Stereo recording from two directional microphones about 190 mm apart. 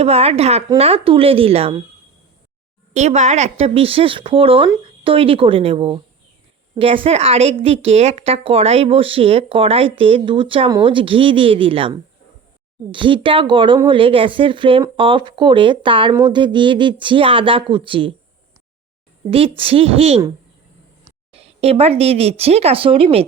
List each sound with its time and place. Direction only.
0.0 s a woman's voice: 30° right (ahead or behind)
2.9 s a woman's voice: 35° right (ahead or behind)
19.3 s speech: 30° right (ahead or behind)
21.3 s speech: 30° right (ahead or behind)